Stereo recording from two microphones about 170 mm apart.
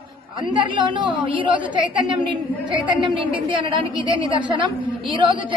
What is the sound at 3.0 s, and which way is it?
Speech, 30° right (ahead or behind).